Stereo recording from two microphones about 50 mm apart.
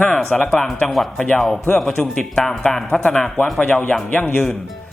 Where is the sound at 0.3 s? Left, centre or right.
Left.